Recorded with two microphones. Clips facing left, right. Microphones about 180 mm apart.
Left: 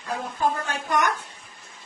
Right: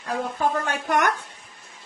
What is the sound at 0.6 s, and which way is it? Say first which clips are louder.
Speech: right 2 dB; 65° right (ahead or behind).